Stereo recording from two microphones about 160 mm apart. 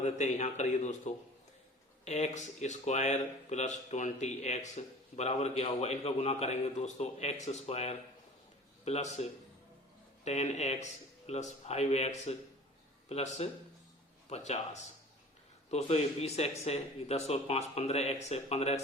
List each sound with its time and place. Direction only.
0.0 s a man's voice: 45° left (ahead or behind)
10.2 s speech: 45° left (ahead or behind)